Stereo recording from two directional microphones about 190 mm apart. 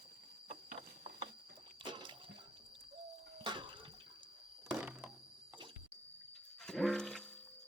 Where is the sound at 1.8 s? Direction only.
25° right (ahead or behind).